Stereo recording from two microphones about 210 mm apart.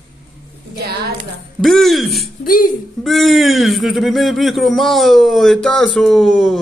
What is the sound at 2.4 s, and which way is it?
Speech, 40° left (ahead or behind).